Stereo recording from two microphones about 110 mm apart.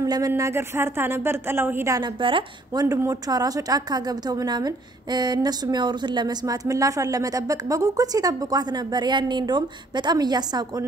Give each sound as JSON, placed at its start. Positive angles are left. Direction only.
{"t": 0.0, "sound": "speech", "side_deg": -30}
{"t": 2.1, "sound": "speech", "side_deg": -50}
{"t": 2.8, "sound": "speech", "side_deg": -30}